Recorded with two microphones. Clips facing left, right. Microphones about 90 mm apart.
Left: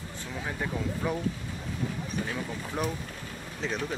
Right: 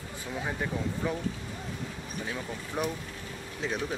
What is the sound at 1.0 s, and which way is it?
Speech, 5° left (ahead or behind).